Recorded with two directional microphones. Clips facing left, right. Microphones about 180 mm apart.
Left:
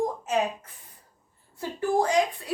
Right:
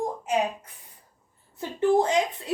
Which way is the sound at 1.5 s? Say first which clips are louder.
Right 3 dB; 25° right (ahead or behind).